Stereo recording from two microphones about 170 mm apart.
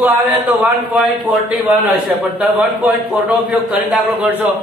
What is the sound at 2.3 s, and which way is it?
A man's voice, 5° right (ahead or behind).